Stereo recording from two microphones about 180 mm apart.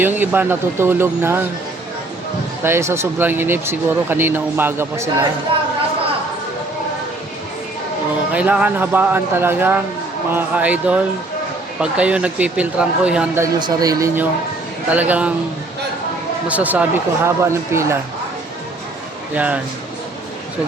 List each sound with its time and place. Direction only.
0.0 s speech: 10° right (ahead or behind)
2.6 s speech: 15° right (ahead or behind)
8.3 s speech: 5° right (ahead or behind)
13.6 s speech: 20° right (ahead or behind)
16.5 s speech: 10° right (ahead or behind)
19.3 s speech: 10° right (ahead or behind)